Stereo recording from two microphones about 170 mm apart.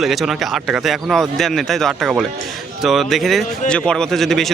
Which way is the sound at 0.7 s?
Centre (ahead or behind).